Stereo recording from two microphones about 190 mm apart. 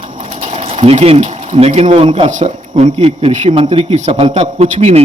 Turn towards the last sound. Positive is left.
turn(degrees=-35)  # may be behind; listen again after turning